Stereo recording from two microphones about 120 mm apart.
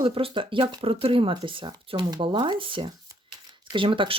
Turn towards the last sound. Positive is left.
turn(degrees=-45)  # may be behind; listen again after turning